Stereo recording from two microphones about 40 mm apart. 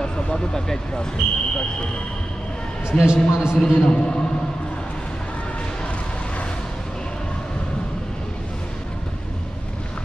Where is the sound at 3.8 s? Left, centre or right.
Left.